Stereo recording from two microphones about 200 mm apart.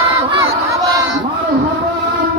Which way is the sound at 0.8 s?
20° right (ahead or behind).